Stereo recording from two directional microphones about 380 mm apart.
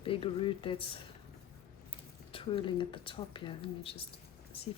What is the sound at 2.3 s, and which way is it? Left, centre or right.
Speech, centre.